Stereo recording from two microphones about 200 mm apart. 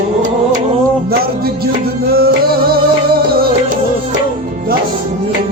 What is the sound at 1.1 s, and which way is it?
Music, 50° right (ahead or behind).